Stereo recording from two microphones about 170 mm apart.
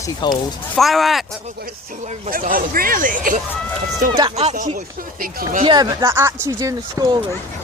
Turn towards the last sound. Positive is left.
turn(degrees=-20)  # may be behind; listen again after turning